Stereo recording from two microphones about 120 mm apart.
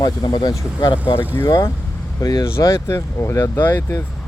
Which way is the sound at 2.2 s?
25° left (ahead or behind).